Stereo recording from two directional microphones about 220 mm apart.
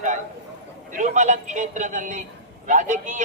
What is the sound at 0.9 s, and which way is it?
A man's voice, 35° right (ahead or behind).